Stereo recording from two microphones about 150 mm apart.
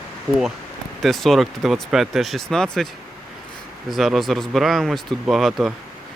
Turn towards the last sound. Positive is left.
turn(degrees=0)  # may be behind; listen again after turning